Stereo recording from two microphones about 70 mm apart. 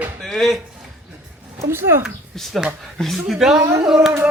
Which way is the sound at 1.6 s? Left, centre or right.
Right.